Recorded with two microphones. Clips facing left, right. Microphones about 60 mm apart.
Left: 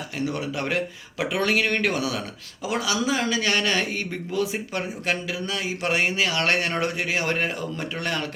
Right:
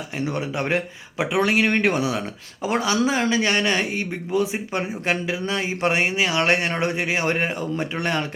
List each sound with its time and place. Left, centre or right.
0.2 s speech: right